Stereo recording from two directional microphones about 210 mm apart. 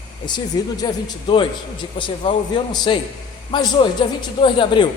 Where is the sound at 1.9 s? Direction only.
25° left (ahead or behind).